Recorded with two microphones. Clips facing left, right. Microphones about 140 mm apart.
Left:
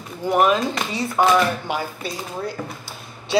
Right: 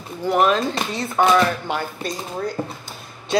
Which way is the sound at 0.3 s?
10° left (ahead or behind).